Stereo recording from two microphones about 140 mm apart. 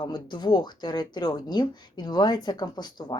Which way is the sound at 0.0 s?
30° left (ahead or behind).